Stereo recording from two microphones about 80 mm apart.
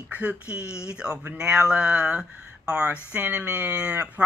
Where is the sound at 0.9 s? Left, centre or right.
Centre.